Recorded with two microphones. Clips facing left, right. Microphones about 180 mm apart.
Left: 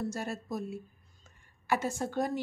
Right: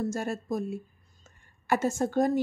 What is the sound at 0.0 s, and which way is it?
A woman's voice, 50° right (ahead or behind).